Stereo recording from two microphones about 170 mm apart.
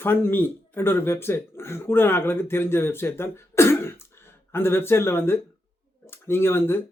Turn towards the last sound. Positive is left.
turn(degrees=15)  # may be behind; listen again after turning